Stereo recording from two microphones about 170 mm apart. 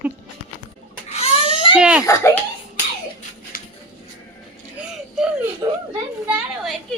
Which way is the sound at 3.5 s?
60° left (ahead or behind).